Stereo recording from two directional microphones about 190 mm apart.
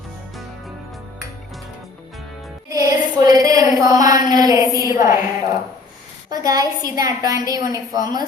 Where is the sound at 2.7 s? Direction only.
20° right (ahead or behind).